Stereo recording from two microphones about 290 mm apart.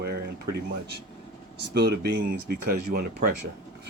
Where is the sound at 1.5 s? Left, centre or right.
Right.